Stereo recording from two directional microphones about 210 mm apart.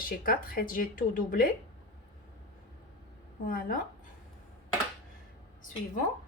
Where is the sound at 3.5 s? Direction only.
45° left (ahead or behind).